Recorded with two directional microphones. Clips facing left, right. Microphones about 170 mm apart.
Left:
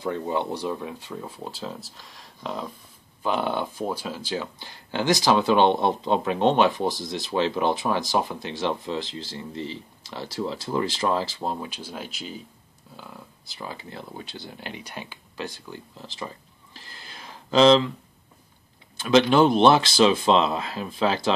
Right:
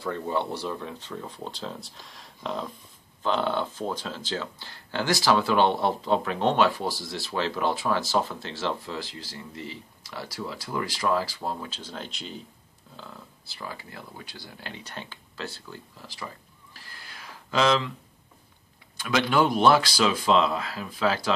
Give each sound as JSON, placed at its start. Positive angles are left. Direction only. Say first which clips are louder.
{"t": 0.0, "sound": "speech", "louder": "left 2 dB", "side_deg": 15}
{"t": 12.9, "sound": "speech", "louder": "left 1 dB", "side_deg": 15}
{"t": 16.7, "sound": "a sound", "louder": "left 3 dB", "side_deg": 20}
{"t": 18.9, "sound": "speech", "louder": "left 6 dB", "side_deg": 25}